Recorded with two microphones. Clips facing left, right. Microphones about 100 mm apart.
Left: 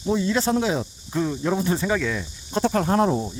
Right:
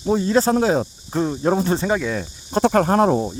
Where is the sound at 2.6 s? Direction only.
65° right (ahead or behind).